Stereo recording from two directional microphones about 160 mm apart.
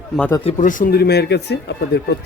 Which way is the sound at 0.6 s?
55° left (ahead or behind).